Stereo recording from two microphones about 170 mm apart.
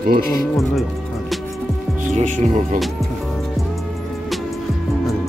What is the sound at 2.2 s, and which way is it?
Speech, 45° right (ahead or behind).